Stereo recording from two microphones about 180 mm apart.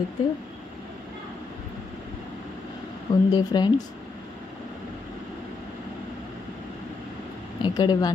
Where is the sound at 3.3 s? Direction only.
25° left (ahead or behind).